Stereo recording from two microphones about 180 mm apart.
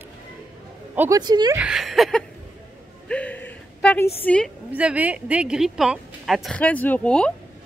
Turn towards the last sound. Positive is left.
turn(degrees=5)  # may be behind; listen again after turning